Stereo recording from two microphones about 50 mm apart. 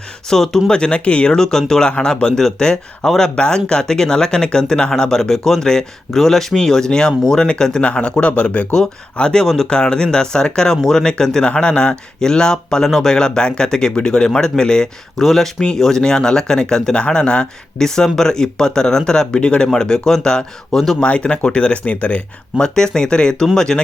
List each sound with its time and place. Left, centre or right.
0.3 s speech: centre
0.7 s speech: centre
21.0 s speech: left
22.5 s speech: centre